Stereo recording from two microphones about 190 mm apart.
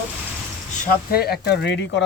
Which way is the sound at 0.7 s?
50° left (ahead or behind).